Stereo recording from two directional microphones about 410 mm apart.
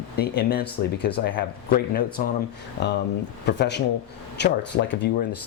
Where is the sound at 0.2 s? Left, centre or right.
Left.